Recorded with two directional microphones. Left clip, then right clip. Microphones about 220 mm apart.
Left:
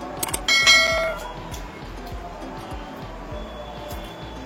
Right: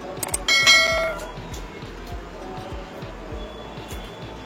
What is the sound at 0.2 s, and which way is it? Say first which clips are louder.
Mechanisms: even; centre (ahead or behind).